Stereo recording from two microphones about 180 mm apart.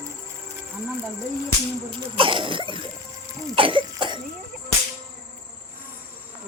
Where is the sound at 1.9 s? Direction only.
30° right (ahead or behind).